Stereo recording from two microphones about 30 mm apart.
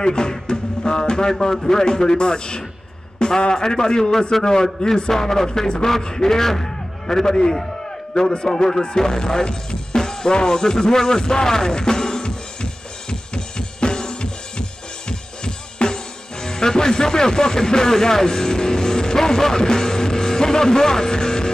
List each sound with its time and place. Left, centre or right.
0.0 s music: left
1.4 s a man's voice: centre
8.8 s music: left